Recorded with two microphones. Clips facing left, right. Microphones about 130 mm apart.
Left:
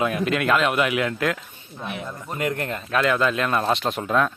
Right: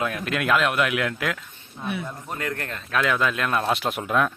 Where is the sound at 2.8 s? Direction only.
Centre (ahead or behind).